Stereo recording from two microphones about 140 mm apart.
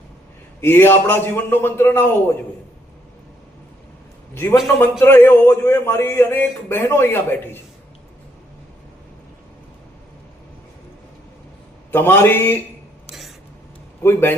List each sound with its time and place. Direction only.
0.6 s a man's voice: 15° left (ahead or behind)
4.8 s a man's voice: 15° left (ahead or behind)
11.9 s a man's voice: 15° left (ahead or behind)
13.1 s a sound: centre (ahead or behind)
14.0 s a man's voice: 15° left (ahead or behind)